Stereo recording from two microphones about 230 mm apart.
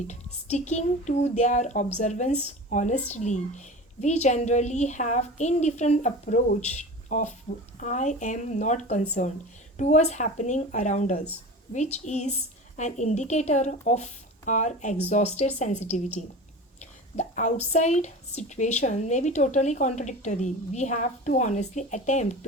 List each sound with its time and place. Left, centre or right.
0.4 s speech: left